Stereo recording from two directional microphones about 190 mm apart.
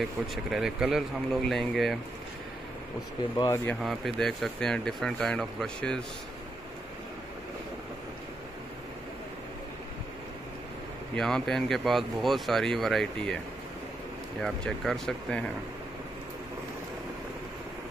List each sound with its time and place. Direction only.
0.0 s speech: centre (ahead or behind)
3.3 s speech: 15° left (ahead or behind)
3.8 s speech: centre (ahead or behind)
11.1 s speech: centre (ahead or behind)
14.4 s speech: 5° left (ahead or behind)